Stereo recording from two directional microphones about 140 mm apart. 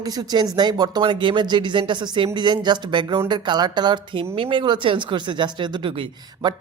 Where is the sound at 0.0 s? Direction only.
25° right (ahead or behind).